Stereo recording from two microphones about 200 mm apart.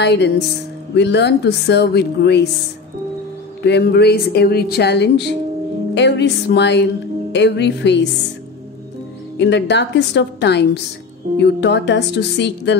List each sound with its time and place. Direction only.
0.0 s speech: 60° left (ahead or behind)
3.6 s speech: 55° left (ahead or behind)
9.4 s speech: 60° left (ahead or behind)